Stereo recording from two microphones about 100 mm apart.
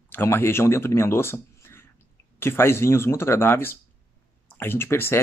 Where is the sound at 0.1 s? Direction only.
25° left (ahead or behind).